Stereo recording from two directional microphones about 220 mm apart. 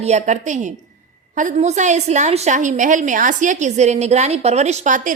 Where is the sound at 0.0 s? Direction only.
30° right (ahead or behind).